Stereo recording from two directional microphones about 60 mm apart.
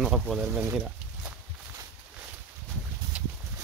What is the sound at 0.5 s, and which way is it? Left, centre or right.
Speech, right.